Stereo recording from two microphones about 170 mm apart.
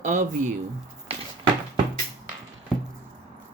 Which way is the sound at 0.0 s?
45° right (ahead or behind).